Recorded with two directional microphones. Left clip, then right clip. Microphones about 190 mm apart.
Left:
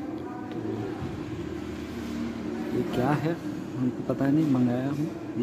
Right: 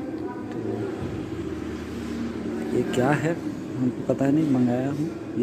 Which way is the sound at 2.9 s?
10° left (ahead or behind).